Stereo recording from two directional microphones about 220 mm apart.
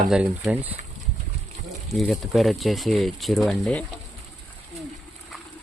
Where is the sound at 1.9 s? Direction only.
Centre (ahead or behind).